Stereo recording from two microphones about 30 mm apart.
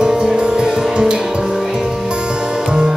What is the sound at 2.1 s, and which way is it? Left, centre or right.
Music, right.